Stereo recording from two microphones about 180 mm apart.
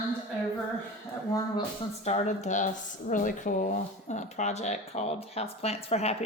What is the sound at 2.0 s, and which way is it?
Speech, 40° left (ahead or behind).